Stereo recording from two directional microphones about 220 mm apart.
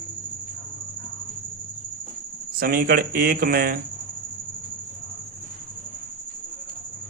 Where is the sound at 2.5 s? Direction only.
40° right (ahead or behind).